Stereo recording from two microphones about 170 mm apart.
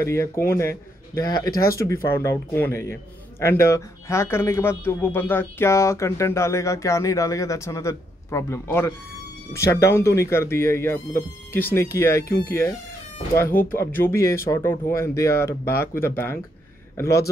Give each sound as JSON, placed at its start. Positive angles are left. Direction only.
{"t": 0.0, "sound": "a man's voice", "side_deg": 15}